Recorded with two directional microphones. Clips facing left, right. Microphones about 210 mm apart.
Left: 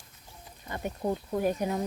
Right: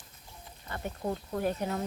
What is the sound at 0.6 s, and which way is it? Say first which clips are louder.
Speech: left 3 dB; 15° left (ahead or behind).